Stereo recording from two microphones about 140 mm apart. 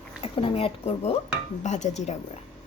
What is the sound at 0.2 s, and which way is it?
Speech, 45° left (ahead or behind).